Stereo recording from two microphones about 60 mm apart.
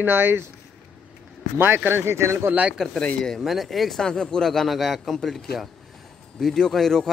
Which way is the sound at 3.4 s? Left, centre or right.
Centre.